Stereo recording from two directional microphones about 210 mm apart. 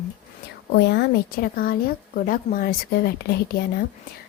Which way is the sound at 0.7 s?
55° left (ahead or behind).